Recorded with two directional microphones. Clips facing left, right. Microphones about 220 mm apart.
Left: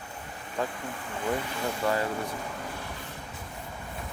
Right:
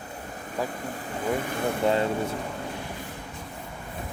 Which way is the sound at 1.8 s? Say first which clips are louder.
Right 4 dB; 25° right (ahead or behind).